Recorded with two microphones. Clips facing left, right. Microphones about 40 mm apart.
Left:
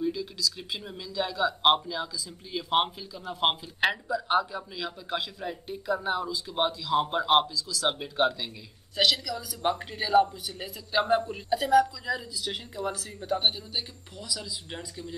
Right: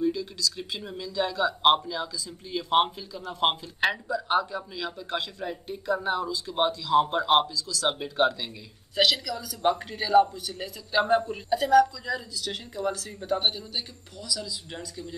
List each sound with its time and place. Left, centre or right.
0.0 s speech: centre
14.2 s speech: centre